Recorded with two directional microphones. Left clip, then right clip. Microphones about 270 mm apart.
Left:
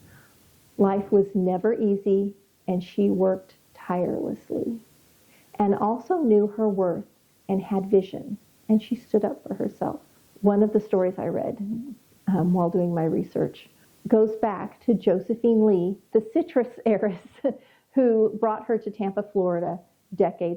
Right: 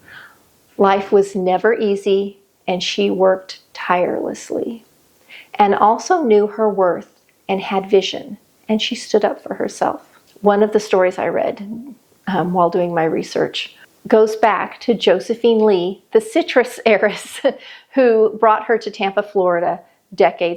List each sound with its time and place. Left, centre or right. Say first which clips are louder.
0.8 s a woman's voice: right 8 dB; centre